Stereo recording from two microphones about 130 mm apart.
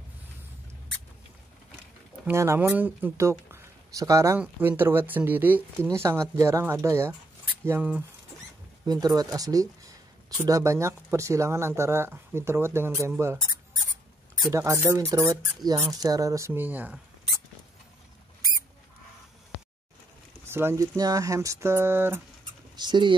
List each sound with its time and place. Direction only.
2.2 s speech: 20° right (ahead or behind)
9.0 s speech: 30° right (ahead or behind)
14.5 s speech: 20° right (ahead or behind)
20.4 s speech: 20° right (ahead or behind)
22.8 s speech: 35° right (ahead or behind)